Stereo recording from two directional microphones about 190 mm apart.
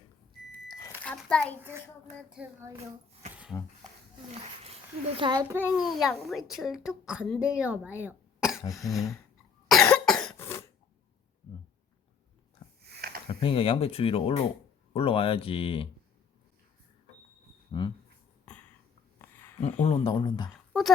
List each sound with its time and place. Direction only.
0.7 s a sound: 15° left (ahead or behind)
1.0 s a sound: 5° left (ahead or behind)
2.1 s a woman's voice: 5° right (ahead or behind)
3.5 s speech: 10° left (ahead or behind)
4.4 s a child's voice: 35° right (ahead or behind); by 5.6 s 15° right (ahead or behind)
5.7 s a woman's voice: centre (ahead or behind)
8.0 s throat clearing: 5° right (ahead or behind)
9.6 s cough: 5° left (ahead or behind)
12.9 s a sound: 55° right (ahead or behind)
13.2 s speech: 30° left (ahead or behind)
17.7 s speech: 25° left (ahead or behind)
19.2 s a sound: 10° left (ahead or behind)
19.8 s speech: 30° left (ahead or behind)